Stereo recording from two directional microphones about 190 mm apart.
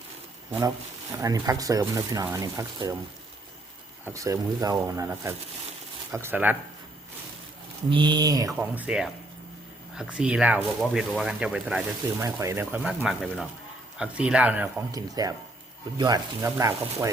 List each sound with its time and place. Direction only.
1.1 s speech: 20° right (ahead or behind)
4.0 s speech: 15° right (ahead or behind)
7.9 s speech: 25° right (ahead or behind)
8.5 s speech: 5° right (ahead or behind)
12.9 s speech: centre (ahead or behind); by 17.1 s 15° right (ahead or behind)